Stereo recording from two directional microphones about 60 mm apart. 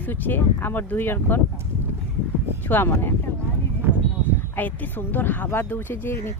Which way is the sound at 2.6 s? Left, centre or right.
Left.